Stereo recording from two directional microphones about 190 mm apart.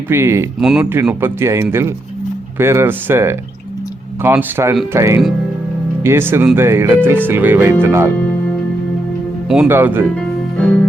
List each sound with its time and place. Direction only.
0.1 s speech: 15° right (ahead or behind)
0.6 s speech: centre (ahead or behind)
0.9 s speech: 10° right (ahead or behind)
9.5 s speech: 5° right (ahead or behind)
10.2 s music: 5° left (ahead or behind)